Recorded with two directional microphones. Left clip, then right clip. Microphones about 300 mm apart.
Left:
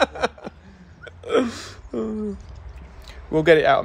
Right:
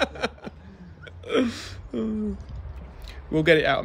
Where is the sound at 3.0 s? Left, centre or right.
Centre.